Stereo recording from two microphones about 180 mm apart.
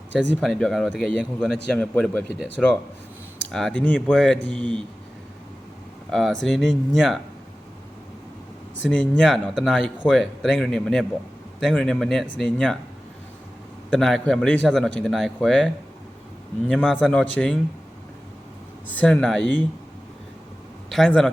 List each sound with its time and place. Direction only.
0.1 s speech: 75° right (ahead or behind)
0.3 s a man's voice: 5° left (ahead or behind)
6.1 s a man's voice: centre (ahead or behind)
8.9 s a man's voice: 5° left (ahead or behind)
13.9 s a man's voice: centre (ahead or behind)
18.9 s a man's voice: 5° left (ahead or behind)
20.9 s a man's voice: centre (ahead or behind)